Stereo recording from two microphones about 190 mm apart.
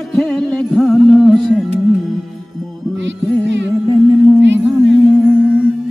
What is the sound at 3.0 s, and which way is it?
Music, 70° right (ahead or behind).